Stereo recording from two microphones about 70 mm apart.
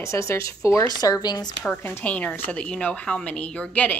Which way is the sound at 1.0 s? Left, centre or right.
Left.